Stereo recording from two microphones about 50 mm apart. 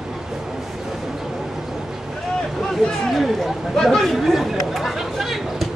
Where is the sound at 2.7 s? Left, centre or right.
Centre.